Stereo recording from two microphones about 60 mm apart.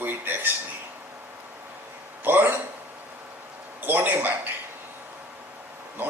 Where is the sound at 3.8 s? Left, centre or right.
Right.